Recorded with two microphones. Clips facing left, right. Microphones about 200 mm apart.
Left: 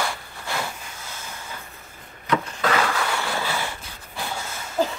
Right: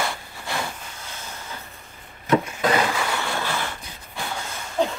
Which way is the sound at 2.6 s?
20° right (ahead or behind).